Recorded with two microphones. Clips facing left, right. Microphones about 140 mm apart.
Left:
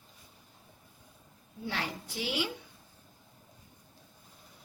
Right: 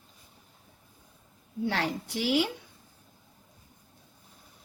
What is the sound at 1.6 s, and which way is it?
Speech, 75° right (ahead or behind).